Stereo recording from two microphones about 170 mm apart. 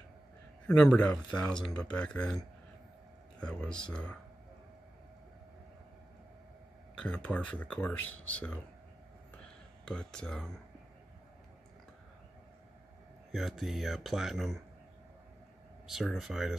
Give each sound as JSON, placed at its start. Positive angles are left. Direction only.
{"t": 0.7, "sound": "speech", "side_deg": 5}
{"t": 7.0, "sound": "speech", "side_deg": 5}
{"t": 9.4, "sound": "a sound", "side_deg": 5}
{"t": 13.3, "sound": "speech", "side_deg": 0}
{"t": 15.9, "sound": "speech", "side_deg": 0}